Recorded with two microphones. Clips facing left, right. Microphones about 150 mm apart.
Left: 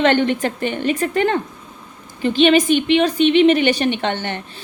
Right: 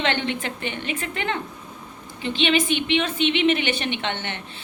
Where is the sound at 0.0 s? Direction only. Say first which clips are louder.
Left 9 dB; 45° left (ahead or behind).